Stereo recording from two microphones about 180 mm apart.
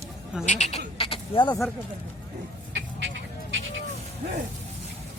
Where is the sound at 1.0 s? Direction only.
30° left (ahead or behind).